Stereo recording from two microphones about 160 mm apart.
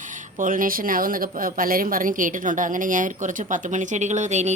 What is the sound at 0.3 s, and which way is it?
A woman's voice, 55° right (ahead or behind).